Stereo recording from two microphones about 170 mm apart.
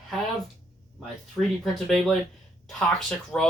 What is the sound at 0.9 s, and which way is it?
Speech, centre (ahead or behind).